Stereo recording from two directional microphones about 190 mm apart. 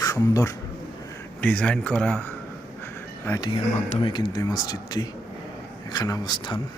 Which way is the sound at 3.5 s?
30° left (ahead or behind).